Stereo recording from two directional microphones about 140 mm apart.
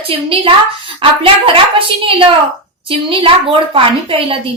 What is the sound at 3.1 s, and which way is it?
A woman's voice, 40° right (ahead or behind).